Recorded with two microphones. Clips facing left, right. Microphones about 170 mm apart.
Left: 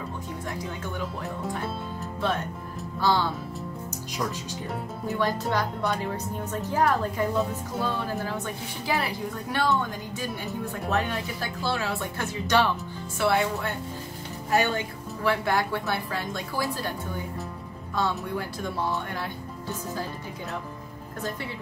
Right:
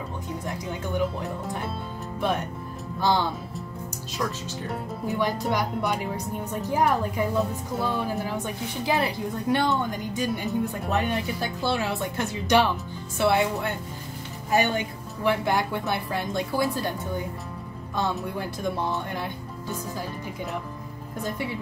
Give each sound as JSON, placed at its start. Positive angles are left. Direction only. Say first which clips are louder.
{"t": 0.9, "sound": "a woman's voice", "louder": "right 5 dB", "side_deg": -20}
{"t": 3.0, "sound": "speech", "louder": "right 1 dB", "side_deg": -15}
{"t": 5.0, "sound": "a woman's voice", "louder": "right 1 dB", "side_deg": -15}
{"t": 18.4, "sound": "a woman's voice", "louder": "right 2 dB", "side_deg": -15}